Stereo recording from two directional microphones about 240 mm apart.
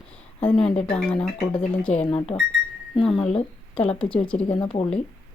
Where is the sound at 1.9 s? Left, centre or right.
Left.